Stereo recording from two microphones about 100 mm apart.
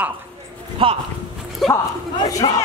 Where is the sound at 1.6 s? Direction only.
Centre (ahead or behind).